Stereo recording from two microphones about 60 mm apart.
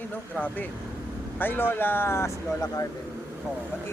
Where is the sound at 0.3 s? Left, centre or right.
Left.